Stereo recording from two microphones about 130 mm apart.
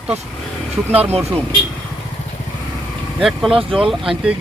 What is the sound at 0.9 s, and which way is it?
Speech, 15° right (ahead or behind).